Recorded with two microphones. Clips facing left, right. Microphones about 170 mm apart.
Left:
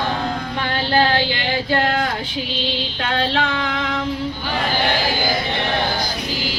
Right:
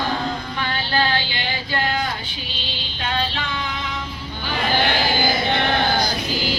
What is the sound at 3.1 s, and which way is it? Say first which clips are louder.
Female singing: left 5 dB; 80° left.